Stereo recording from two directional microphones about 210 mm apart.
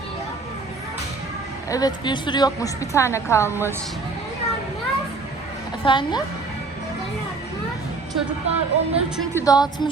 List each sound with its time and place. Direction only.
1.7 s a woman's voice: 20° left (ahead or behind)
5.8 s a woman's voice: 25° left (ahead or behind)
8.4 s speech: 30° right (ahead or behind)
9.3 s a woman's voice: 15° left (ahead or behind)